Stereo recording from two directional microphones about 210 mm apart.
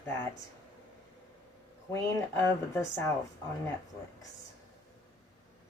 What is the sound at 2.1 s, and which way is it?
Speech, 10° left (ahead or behind).